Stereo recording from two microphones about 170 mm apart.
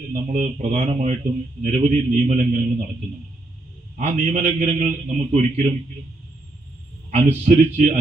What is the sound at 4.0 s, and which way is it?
Speech, 45° right (ahead or behind).